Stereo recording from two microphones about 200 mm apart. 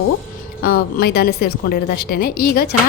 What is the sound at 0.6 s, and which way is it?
A woman's voice, 50° left (ahead or behind).